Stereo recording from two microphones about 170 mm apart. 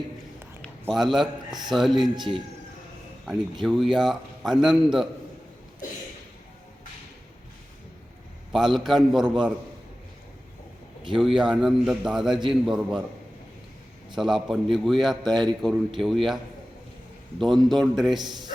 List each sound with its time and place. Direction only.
0.6 s a man's voice: centre (ahead or behind)
8.5 s a man's voice: centre (ahead or behind)
11.3 s a man's voice: 5° right (ahead or behind)
14.2 s a man's voice: centre (ahead or behind)
18.2 s a man's voice: 25° right (ahead or behind)